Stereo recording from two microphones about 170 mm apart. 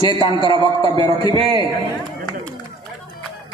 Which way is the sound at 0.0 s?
30° left (ahead or behind).